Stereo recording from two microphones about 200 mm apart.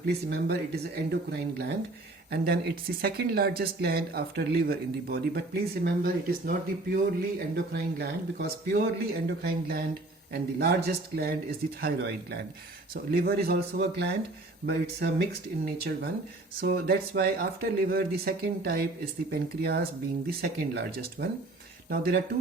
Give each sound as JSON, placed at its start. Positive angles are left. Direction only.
{"t": 0.1, "sound": "speech", "side_deg": -55}